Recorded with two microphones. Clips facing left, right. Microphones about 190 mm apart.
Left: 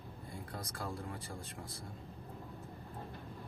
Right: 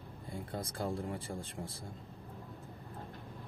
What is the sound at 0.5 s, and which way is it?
Speech, 25° right (ahead or behind).